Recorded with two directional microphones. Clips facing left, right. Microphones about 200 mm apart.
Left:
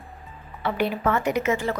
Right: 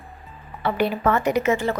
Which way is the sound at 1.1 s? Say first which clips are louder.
Right 3 dB; 35° right (ahead or behind).